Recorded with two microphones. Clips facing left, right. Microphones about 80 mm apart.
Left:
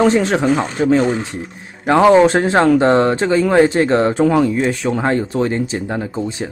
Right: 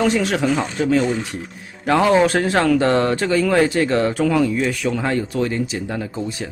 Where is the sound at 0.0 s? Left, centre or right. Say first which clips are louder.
Left 4 dB; left.